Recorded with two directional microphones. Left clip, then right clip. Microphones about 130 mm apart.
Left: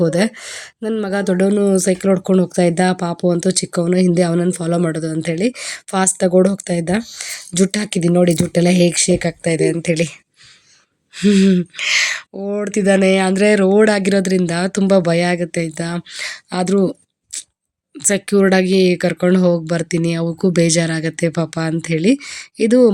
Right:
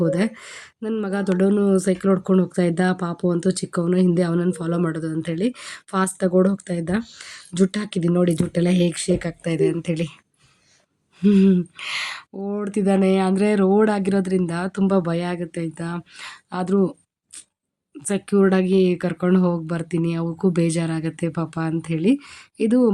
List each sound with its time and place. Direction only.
0.0 s speech: 25° left (ahead or behind)
11.2 s speech: 5° left (ahead or behind)